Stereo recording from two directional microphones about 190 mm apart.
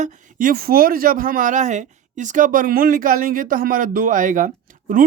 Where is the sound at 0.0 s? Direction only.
40° right (ahead or behind).